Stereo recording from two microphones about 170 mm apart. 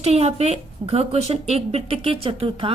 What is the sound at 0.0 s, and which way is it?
A woman's voice, 40° right (ahead or behind).